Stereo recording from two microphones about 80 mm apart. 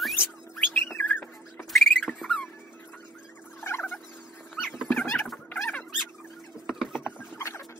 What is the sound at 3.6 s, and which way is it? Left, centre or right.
Music, left.